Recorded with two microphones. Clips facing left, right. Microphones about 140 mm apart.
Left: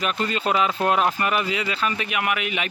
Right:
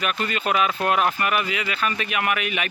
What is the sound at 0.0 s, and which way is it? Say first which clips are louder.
Speech: left 1 dB; 30° left (ahead or behind).